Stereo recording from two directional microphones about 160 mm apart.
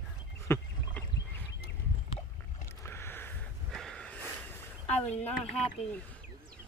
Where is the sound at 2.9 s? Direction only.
15° left (ahead or behind).